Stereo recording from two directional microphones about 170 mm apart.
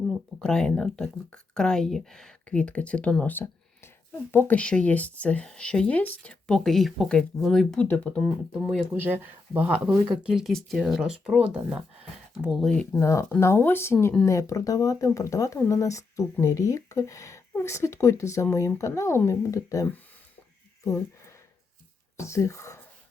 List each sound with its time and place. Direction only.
0.4 s speech: 5° left (ahead or behind)
9.0 s speech: 10° right (ahead or behind); by 20.0 s 20° left (ahead or behind)
20.8 s a sound: 15° left (ahead or behind)
22.2 s speech: 15° left (ahead or behind)